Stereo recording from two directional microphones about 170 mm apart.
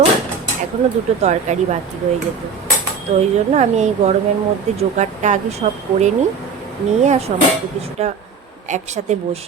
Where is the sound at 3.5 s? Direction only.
40° right (ahead or behind).